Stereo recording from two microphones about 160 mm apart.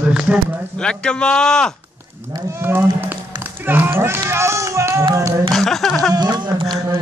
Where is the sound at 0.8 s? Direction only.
5° left (ahead or behind).